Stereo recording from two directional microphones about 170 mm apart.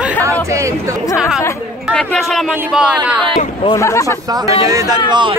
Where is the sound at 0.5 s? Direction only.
20° right (ahead or behind).